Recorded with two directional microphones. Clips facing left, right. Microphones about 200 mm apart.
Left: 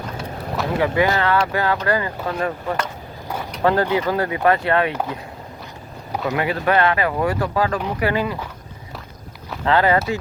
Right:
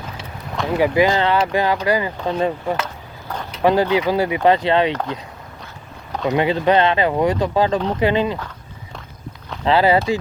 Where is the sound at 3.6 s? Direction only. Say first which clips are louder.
Right 2 dB; 15° right (ahead or behind).